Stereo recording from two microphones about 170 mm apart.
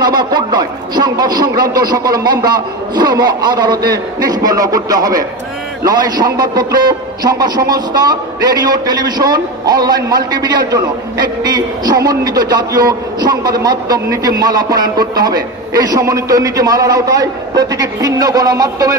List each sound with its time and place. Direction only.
0.0 s a man's voice: 25° right (ahead or behind)